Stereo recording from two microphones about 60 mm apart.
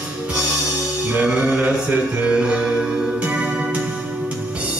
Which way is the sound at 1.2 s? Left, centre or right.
Centre.